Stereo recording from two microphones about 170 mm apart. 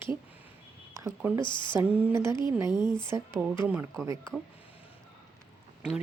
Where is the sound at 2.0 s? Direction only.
10° right (ahead or behind).